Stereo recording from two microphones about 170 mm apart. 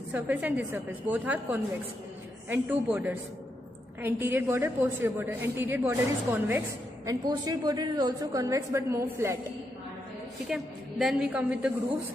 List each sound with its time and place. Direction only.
0.1 s a woman's voice: 10° right (ahead or behind)
2.9 s a woman's voice: 10° right (ahead or behind)
7.1 s a woman's voice: 25° right (ahead or behind)
10.5 s a woman's voice: centre (ahead or behind)